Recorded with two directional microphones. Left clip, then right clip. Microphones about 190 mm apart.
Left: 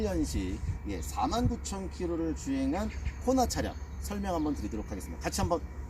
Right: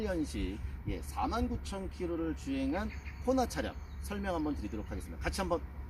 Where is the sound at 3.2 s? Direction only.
10° left (ahead or behind).